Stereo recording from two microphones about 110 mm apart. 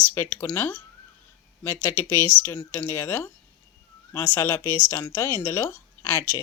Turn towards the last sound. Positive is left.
turn(degrees=25)  # may be behind; listen again after turning